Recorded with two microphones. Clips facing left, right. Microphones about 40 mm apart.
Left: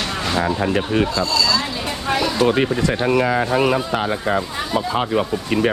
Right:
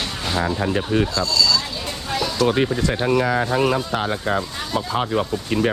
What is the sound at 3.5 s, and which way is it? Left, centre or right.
Speech, left.